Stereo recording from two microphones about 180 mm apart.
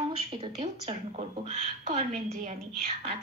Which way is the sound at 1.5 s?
40° right (ahead or behind).